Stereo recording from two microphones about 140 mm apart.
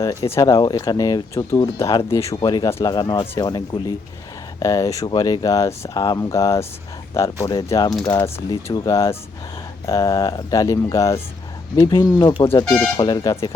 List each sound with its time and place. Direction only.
0.0 s speech: 20° left (ahead or behind)
2.4 s speech: 30° left (ahead or behind)
2.6 s speech: 20° left (ahead or behind)
2.9 s speech: 30° left (ahead or behind)
12.6 s speech: 15° left (ahead or behind)
13.0 s speech: 30° left (ahead or behind)